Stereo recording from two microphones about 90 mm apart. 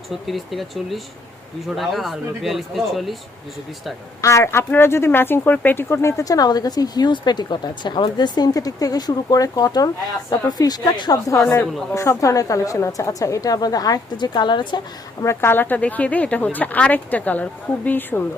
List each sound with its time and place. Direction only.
0.1 s speech: centre (ahead or behind)
4.2 s a woman's voice: 35° left (ahead or behind); by 11.2 s 50° left (ahead or behind)
11.9 s a woman's voice: 35° left (ahead or behind); by 14.8 s 60° left (ahead or behind)
15.2 s speech: 30° left (ahead or behind)